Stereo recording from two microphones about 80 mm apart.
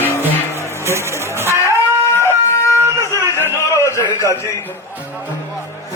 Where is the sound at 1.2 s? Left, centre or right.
Right.